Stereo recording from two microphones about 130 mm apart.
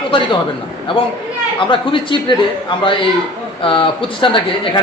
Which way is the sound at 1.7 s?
40° left (ahead or behind).